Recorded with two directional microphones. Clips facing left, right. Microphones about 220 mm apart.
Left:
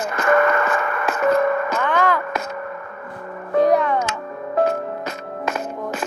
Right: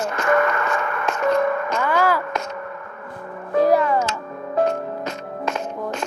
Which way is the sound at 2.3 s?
5° left (ahead or behind).